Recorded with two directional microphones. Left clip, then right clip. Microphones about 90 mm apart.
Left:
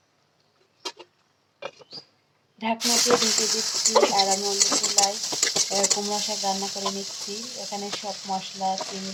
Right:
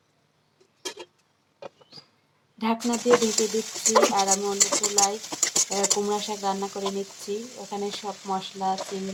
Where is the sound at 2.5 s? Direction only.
25° right (ahead or behind).